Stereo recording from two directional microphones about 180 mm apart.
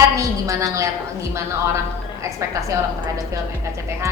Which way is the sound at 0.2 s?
15° right (ahead or behind).